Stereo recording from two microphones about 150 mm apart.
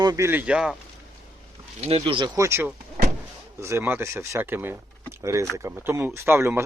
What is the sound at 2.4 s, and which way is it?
Speech, 15° right (ahead or behind).